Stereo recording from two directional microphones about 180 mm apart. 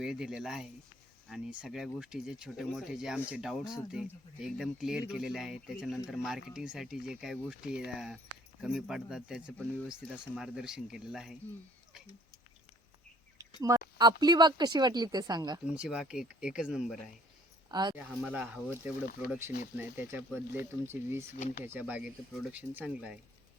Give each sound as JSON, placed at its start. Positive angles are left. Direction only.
{"t": 0.0, "sound": "speech", "side_deg": -5}
{"t": 13.6, "sound": "a sound", "side_deg": -15}
{"t": 14.0, "sound": "speech", "side_deg": -25}
{"t": 15.6, "sound": "speech", "side_deg": -5}
{"t": 17.7, "sound": "speech", "side_deg": -20}
{"t": 17.9, "sound": "speech", "side_deg": -5}